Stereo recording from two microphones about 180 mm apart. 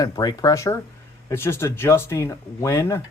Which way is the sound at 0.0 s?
20° left (ahead or behind).